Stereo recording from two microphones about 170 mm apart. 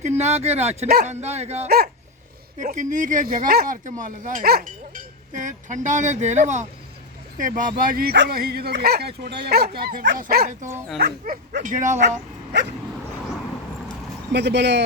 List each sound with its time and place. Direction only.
0.0 s speech: 40° right (ahead or behind)
12.5 s speech: 90° right
14.3 s speech: 90° right